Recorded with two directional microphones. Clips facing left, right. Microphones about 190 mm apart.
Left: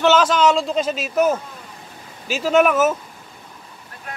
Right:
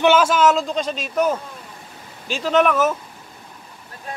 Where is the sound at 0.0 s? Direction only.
10° right (ahead or behind); by 3.0 s 10° left (ahead or behind).